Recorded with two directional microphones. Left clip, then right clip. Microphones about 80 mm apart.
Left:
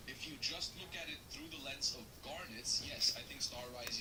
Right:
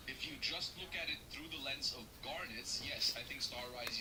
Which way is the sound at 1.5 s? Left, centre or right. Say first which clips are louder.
Right 1 dB; right.